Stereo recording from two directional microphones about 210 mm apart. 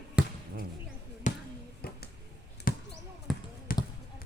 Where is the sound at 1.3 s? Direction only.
35° left (ahead or behind).